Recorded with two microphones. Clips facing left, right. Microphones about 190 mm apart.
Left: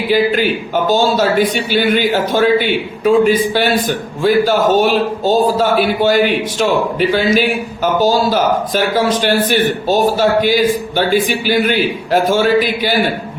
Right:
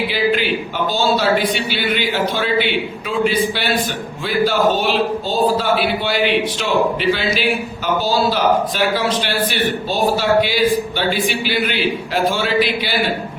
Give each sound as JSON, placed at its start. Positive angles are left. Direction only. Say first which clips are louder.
{"t": 0.1, "sound": "a man's voice", "louder": "left 5 dB", "side_deg": 45}